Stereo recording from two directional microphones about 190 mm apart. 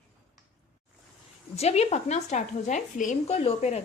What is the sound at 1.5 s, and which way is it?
Speech, 35° left (ahead or behind).